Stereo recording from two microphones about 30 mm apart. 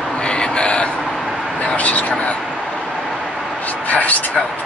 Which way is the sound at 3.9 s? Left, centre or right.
Left.